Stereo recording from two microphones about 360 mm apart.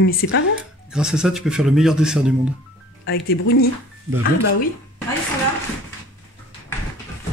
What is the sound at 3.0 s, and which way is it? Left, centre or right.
Speech, left.